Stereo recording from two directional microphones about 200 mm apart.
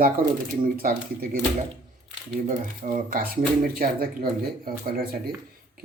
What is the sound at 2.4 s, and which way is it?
Speech, 45° right (ahead or behind).